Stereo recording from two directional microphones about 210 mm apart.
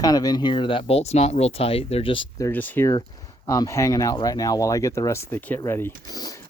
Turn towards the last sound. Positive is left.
turn(degrees=15)  # may be behind; listen again after turning